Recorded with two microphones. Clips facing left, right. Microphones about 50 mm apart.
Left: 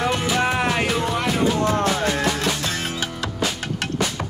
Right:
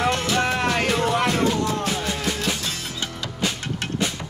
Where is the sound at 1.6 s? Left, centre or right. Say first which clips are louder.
Left 4 dB; left.